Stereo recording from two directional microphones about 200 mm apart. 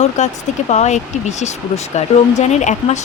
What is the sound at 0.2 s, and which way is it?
Speech, 35° left (ahead or behind).